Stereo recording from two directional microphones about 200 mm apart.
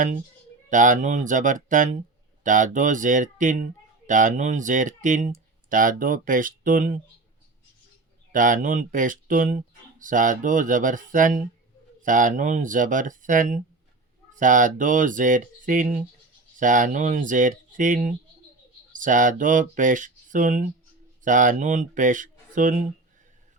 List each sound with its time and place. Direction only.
0.7 s speech: 40° right (ahead or behind)
8.3 s speech: 40° right (ahead or behind)